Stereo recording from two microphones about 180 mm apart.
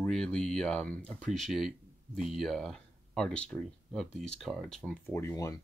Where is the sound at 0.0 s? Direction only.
5° left (ahead or behind).